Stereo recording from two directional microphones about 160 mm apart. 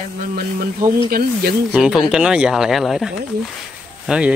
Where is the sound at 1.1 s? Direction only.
70° right (ahead or behind).